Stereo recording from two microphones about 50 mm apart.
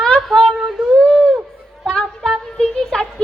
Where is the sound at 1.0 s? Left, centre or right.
Left.